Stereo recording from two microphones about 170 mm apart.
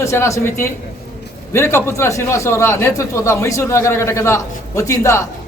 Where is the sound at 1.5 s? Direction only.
15° left (ahead or behind).